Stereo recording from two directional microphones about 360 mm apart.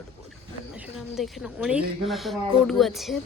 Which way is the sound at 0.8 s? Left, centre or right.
Centre.